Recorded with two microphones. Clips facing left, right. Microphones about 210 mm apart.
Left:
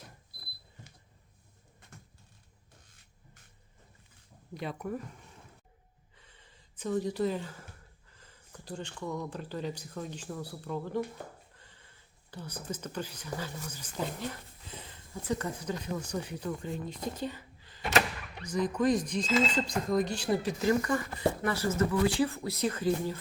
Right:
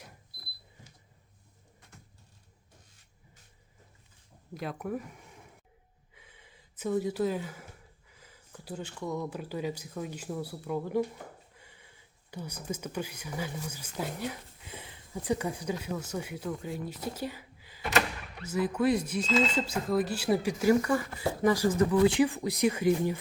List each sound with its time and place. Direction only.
4.5 s speech: centre (ahead or behind)
6.1 s gasp: 10° right (ahead or behind)
8.1 s speech: 5° right (ahead or behind)